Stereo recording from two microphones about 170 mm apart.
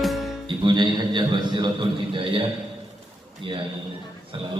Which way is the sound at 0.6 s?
25° right (ahead or behind).